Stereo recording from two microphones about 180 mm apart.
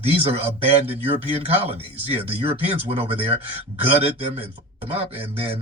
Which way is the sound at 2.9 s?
30° right (ahead or behind).